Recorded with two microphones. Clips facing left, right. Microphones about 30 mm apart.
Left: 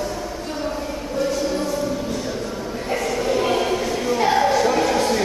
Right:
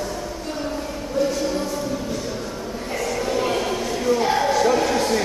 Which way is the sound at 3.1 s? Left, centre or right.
Centre.